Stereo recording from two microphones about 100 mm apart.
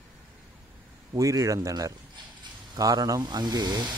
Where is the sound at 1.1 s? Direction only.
35° right (ahead or behind).